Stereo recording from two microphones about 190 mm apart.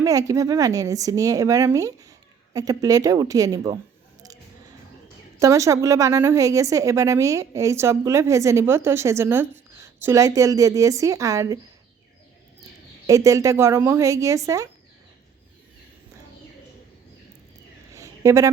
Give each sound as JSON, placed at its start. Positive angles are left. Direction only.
{"t": 0.0, "sound": "a woman's voice", "side_deg": -20}
{"t": 5.4, "sound": "a woman's voice", "side_deg": -15}
{"t": 13.1, "sound": "a woman's voice", "side_deg": -15}
{"t": 17.9, "sound": "a sound", "side_deg": -15}